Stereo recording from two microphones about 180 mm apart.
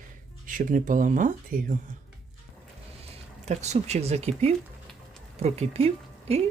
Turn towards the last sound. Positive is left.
turn(degrees=-35)  # may be behind; listen again after turning